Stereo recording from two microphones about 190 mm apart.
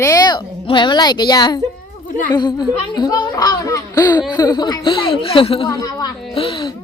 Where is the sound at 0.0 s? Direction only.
20° left (ahead or behind).